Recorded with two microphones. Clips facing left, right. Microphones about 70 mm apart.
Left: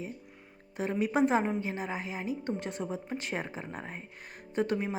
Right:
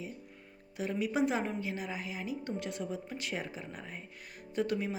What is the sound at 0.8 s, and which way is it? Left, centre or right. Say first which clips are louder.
Speech: left 4 dB; left.